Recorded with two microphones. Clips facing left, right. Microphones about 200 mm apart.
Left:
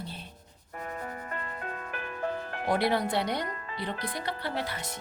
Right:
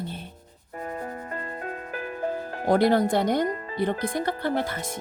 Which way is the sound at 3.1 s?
45° right (ahead or behind).